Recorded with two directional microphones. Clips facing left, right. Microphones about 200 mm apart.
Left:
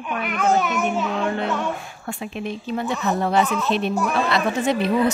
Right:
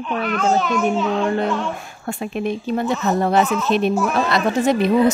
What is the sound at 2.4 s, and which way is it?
Speech, 50° right (ahead or behind).